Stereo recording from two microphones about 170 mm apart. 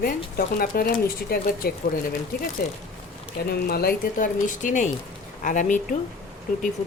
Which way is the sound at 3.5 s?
65° left (ahead or behind).